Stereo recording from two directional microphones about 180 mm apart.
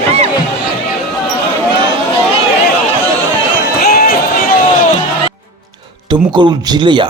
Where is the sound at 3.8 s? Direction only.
55° left (ahead or behind).